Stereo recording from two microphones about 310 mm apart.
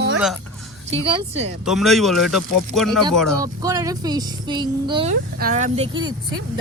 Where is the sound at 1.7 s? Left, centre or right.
Centre.